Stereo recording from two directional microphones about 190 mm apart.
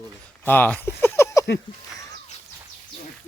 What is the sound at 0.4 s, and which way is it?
Speech, 10° left (ahead or behind).